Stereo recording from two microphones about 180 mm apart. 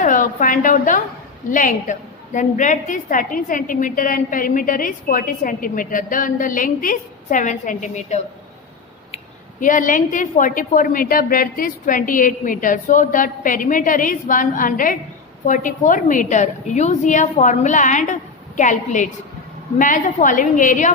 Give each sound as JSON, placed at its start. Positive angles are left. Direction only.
{"t": 0.0, "sound": "a woman's voice", "side_deg": 50}